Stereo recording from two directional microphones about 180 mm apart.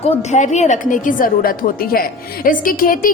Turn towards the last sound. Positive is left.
turn(degrees=50)  # may be behind; listen again after turning